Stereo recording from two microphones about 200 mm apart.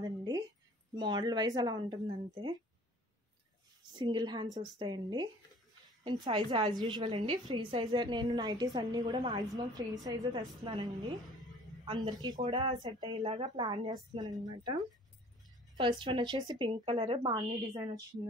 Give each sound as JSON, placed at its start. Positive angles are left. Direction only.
{"t": 0.0, "sound": "a sound", "side_deg": -20}
{"t": 0.9, "sound": "a woman's voice", "side_deg": -20}
{"t": 4.0, "sound": "a woman's voice", "side_deg": -20}
{"t": 15.8, "sound": "a woman's voice", "side_deg": -25}